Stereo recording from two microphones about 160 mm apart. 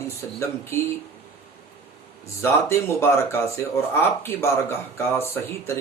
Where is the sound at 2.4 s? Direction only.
15° left (ahead or behind).